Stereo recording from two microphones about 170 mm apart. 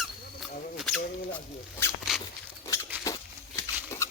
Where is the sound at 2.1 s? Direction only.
5° right (ahead or behind).